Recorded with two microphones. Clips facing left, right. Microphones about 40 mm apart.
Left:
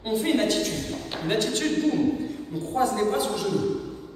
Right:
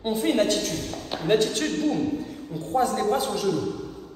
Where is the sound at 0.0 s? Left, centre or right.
Centre.